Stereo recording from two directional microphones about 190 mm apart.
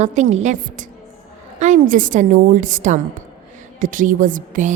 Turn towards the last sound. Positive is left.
turn(degrees=-45)  # may be behind; listen again after turning